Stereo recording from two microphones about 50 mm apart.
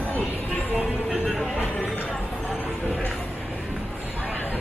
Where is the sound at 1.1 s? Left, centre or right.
Centre.